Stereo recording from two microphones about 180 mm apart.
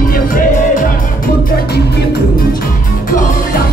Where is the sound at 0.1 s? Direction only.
50° left (ahead or behind).